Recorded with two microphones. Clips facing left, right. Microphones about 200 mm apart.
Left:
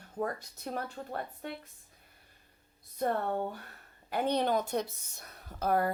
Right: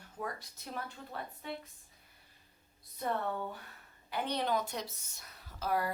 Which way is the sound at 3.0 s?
45° left (ahead or behind).